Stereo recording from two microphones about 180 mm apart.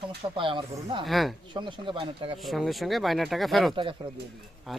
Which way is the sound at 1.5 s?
25° right (ahead or behind).